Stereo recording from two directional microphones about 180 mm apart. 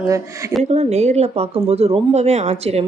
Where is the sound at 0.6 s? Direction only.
40° right (ahead or behind).